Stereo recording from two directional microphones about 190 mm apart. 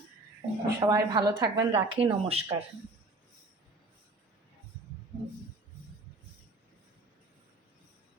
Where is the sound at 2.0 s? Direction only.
30° right (ahead or behind).